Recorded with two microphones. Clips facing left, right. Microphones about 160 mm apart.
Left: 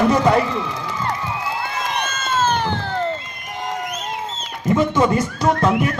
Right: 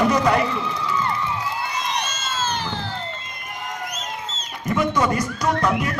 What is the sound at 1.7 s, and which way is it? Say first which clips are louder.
Crowd: left 2 dB; 55° left (ahead or behind).